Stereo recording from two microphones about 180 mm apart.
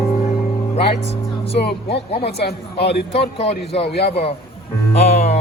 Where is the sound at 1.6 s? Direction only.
65° left (ahead or behind).